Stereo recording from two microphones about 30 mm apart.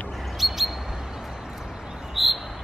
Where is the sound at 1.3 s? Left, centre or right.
Centre.